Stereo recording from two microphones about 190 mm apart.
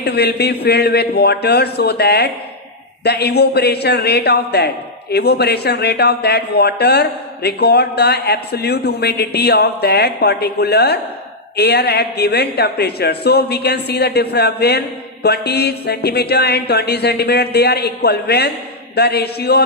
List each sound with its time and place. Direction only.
0.0 s speech: 60° left (ahead or behind)